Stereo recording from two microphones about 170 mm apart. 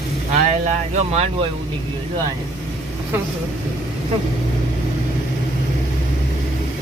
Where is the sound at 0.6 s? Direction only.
45° right (ahead or behind).